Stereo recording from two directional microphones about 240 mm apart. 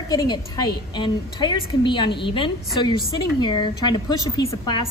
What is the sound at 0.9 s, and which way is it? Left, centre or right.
A woman's voice, centre.